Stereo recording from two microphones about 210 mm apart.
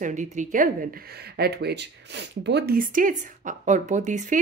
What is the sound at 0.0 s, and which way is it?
Speech, 35° right (ahead or behind).